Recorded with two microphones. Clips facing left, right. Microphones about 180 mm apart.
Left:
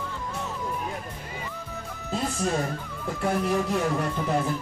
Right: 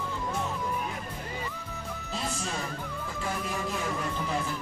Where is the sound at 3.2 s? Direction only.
60° left (ahead or behind).